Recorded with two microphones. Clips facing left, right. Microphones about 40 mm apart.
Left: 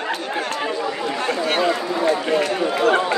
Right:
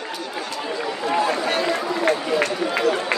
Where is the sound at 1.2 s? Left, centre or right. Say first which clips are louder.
Left 2 dB; left.